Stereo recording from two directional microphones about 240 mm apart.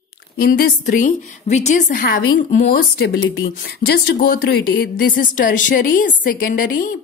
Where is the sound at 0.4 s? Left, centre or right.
Left.